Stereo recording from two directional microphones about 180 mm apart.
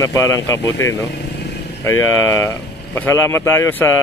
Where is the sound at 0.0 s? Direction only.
15° left (ahead or behind).